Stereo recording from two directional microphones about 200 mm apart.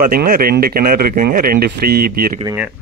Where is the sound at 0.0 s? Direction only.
45° right (ahead or behind).